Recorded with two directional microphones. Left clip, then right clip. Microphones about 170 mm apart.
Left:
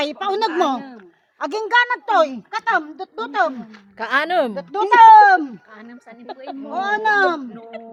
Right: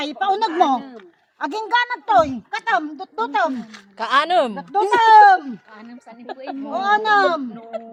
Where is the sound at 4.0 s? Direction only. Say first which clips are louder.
Right 2 dB; 20° left (ahead or behind).